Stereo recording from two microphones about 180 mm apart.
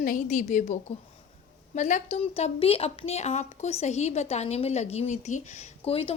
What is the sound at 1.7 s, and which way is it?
A woman's voice, 40° left (ahead or behind).